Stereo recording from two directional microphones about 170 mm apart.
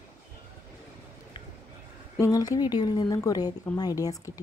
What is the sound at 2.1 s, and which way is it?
Speech, 20° left (ahead or behind).